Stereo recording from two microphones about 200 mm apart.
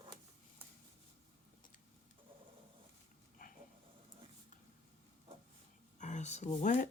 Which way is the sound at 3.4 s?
45° left (ahead or behind).